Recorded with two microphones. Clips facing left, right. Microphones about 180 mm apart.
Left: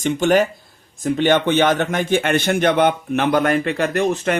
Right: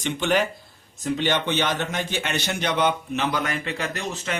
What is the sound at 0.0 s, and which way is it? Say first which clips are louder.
A man's voice: left 7 dB; 45° left (ahead or behind).